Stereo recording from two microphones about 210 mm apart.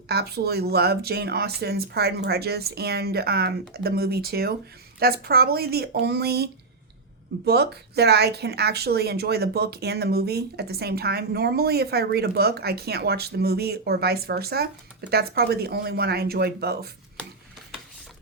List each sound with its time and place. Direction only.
0.1 s speech: 50° right (ahead or behind)